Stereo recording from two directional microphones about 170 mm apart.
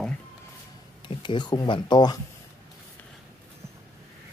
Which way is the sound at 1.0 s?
30° left (ahead or behind).